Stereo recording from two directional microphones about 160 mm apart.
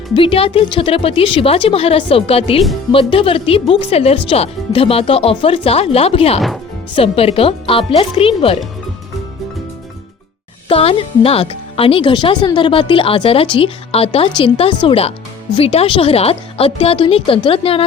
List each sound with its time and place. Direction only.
0.1 s speech: 35° left (ahead or behind)
10.7 s speech: 35° left (ahead or behind)